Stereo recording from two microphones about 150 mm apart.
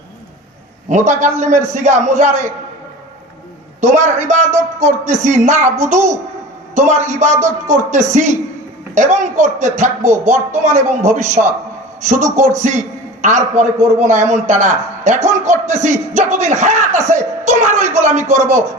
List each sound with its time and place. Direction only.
0.9 s speech: 55° right (ahead or behind)
3.8 s speech: 50° right (ahead or behind)